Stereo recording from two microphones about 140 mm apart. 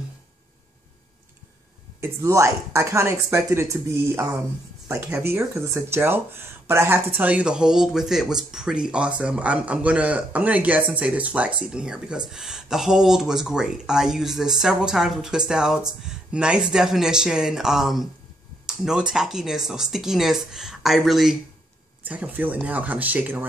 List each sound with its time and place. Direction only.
2.0 s speech: 20° right (ahead or behind)